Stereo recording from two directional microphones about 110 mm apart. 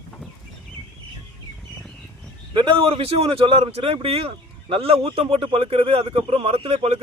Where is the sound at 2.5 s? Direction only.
45° right (ahead or behind).